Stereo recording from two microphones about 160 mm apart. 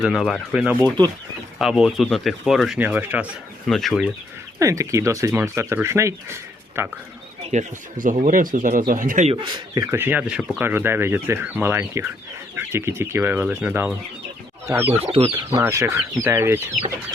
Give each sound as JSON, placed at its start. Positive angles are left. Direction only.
{"t": 0.0, "sound": "speech", "side_deg": 0}
{"t": 3.7, "sound": "speech", "side_deg": 0}
{"t": 4.6, "sound": "speech", "side_deg": -20}
{"t": 7.5, "sound": "speech", "side_deg": -50}
{"t": 9.3, "sound": "speech", "side_deg": -30}
{"t": 15.1, "sound": "speech", "side_deg": -35}
{"t": 15.4, "sound": "speech", "side_deg": -20}